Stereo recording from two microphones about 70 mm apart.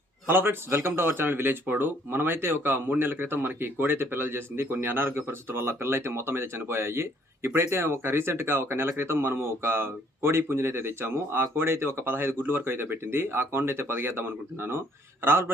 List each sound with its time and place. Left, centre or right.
0.3 s speech: right